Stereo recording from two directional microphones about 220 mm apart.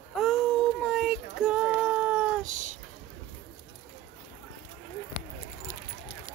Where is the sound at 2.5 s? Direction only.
35° right (ahead or behind).